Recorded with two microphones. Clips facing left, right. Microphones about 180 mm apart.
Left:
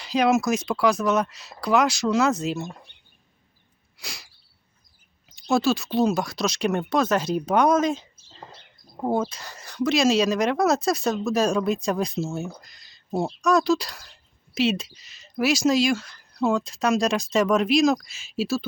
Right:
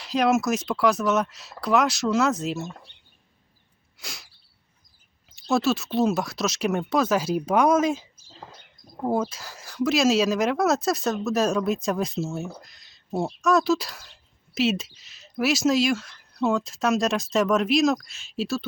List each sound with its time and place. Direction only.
0.0 s speech: centre (ahead or behind)
3.9 s sneeze: centre (ahead or behind)
5.4 s speech: centre (ahead or behind)
9.0 s speech: 10° left (ahead or behind)
9.3 s speech: 5° right (ahead or behind)